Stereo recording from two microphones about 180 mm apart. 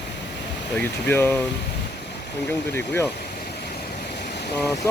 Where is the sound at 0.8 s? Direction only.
10° left (ahead or behind).